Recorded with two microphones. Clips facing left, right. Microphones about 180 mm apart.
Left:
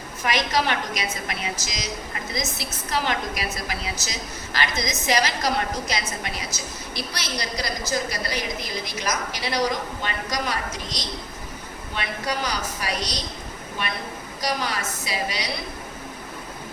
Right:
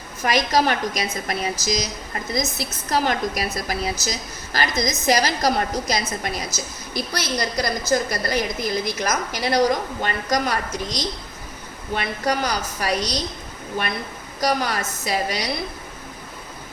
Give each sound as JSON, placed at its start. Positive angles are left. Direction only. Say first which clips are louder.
{"t": 0.3, "sound": "a woman's voice", "louder": "right 4 dB", "side_deg": -40}
{"t": 14.4, "sound": "a woman's voice", "louder": "right 5 dB", "side_deg": -45}